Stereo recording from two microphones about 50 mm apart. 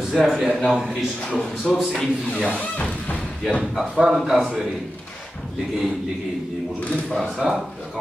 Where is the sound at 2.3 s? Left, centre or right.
Left.